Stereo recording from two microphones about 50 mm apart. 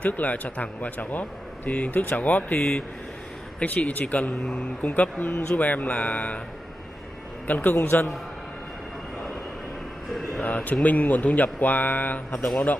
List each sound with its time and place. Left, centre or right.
0.0 s speech: left
3.6 s speech: left
7.4 s speech: left
10.4 s speech: left